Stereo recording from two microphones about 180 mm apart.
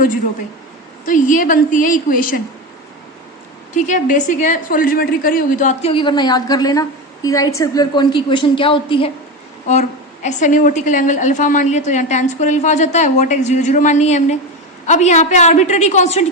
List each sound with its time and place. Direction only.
1.0 s a woman's voice: 45° left (ahead or behind)
3.8 s a woman's voice: 45° left (ahead or behind)
5.9 s a woman's voice: 25° left (ahead or behind)
10.2 s a woman's voice: 45° left (ahead or behind)